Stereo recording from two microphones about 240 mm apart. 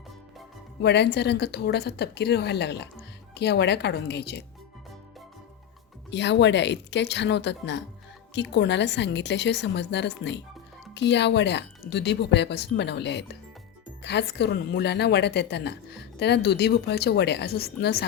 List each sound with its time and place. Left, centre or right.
0.8 s a woman's voice: left
6.1 s a woman's voice: left